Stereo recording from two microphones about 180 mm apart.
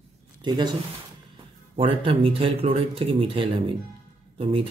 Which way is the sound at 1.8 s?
30° right (ahead or behind).